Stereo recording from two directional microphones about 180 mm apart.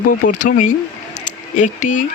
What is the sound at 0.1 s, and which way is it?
Speech, 45° left (ahead or behind).